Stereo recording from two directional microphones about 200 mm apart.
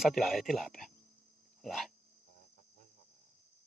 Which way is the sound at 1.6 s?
Centre (ahead or behind).